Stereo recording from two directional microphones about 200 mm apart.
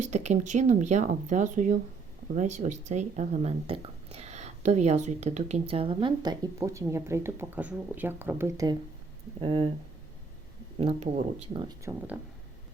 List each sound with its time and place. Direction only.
0.0 s speech: 35° right (ahead or behind)
10.8 s speech: 30° right (ahead or behind)
11.9 s speech: 10° right (ahead or behind)